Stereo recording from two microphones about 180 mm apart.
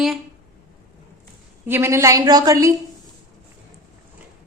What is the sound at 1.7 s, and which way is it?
A woman's voice, 15° right (ahead or behind).